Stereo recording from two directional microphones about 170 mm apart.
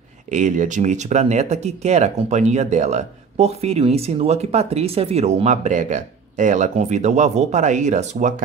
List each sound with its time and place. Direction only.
0.3 s speech: 45° right (ahead or behind)